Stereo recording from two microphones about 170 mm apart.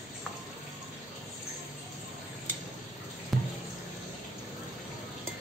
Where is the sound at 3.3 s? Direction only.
Centre (ahead or behind).